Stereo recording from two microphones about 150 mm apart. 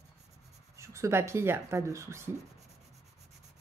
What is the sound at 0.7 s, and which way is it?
Speech, 20° right (ahead or behind).